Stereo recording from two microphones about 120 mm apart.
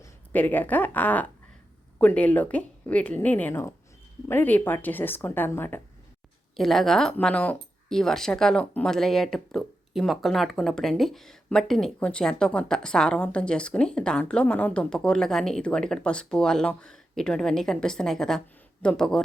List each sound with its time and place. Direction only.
0.3 s speech: 15° left (ahead or behind)
6.6 s speech: centre (ahead or behind)